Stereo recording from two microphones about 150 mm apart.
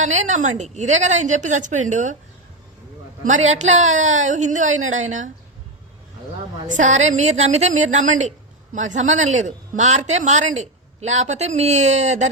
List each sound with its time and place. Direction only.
0.0 s speech: 50° right (ahead or behind)
3.2 s speech: 50° right (ahead or behind)
6.7 s speech: 55° right (ahead or behind)